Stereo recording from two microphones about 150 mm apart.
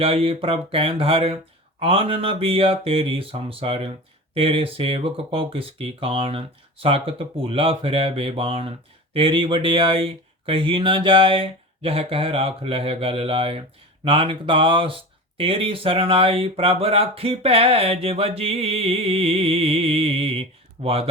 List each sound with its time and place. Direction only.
0.0 s speech: 40° right (ahead or behind)